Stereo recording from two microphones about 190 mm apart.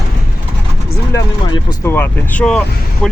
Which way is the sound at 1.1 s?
20° left (ahead or behind).